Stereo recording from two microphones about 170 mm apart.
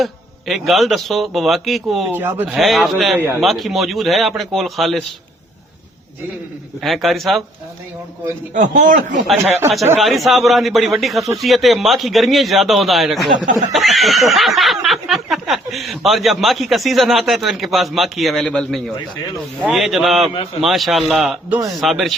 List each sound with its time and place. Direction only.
0.0 s speech: centre (ahead or behind)
2.0 s speech: 10° right (ahead or behind)
2.6 s speech: centre (ahead or behind)
6.8 s speech: centre (ahead or behind)
8.5 s speech: 50° right (ahead or behind)
10.0 s speech: centre (ahead or behind)